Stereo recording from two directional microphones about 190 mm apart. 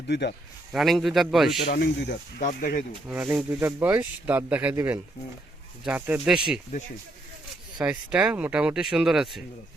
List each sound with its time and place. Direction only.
0.1 s speech: 60° left (ahead or behind)
0.7 s speech: centre (ahead or behind)
1.7 s speech: 60° left (ahead or behind)
2.5 s speech: 45° left (ahead or behind)
3.1 s speech: 10° right (ahead or behind)
7.8 s speech: 5° right (ahead or behind)